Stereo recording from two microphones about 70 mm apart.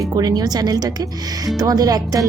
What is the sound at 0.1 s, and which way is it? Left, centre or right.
Speech, right.